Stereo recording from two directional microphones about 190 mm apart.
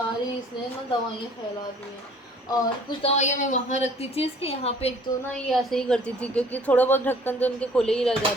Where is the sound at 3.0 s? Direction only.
35° left (ahead or behind).